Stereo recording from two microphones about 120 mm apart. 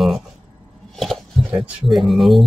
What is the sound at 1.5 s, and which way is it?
Speech, centre (ahead or behind).